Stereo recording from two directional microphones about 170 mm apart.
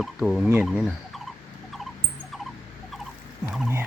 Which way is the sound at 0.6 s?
Centre (ahead or behind).